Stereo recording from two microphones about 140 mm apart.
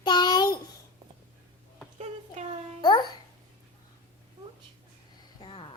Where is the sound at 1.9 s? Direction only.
50° right (ahead or behind).